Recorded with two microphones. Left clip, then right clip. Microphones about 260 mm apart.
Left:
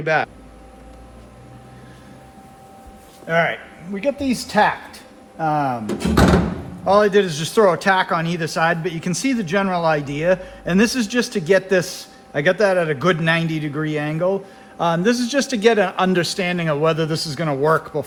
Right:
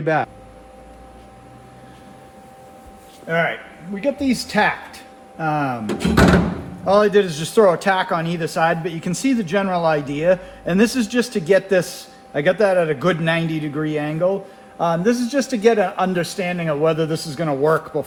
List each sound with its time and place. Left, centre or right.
0.0 s speech: right
3.2 s a man's voice: left; by 6.3 s centre
6.8 s a man's voice: left